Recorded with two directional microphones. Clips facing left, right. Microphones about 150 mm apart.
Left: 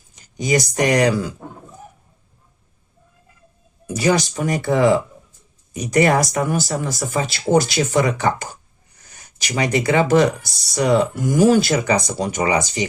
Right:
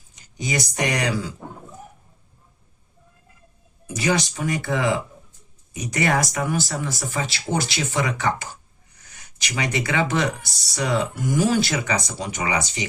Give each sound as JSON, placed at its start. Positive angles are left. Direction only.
{"t": 0.3, "sound": "speech", "side_deg": 40}
{"t": 3.8, "sound": "speech", "side_deg": 40}